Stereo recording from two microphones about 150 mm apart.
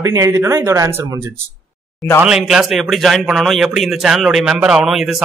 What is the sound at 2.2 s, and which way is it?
A man's voice, 5° right (ahead or behind).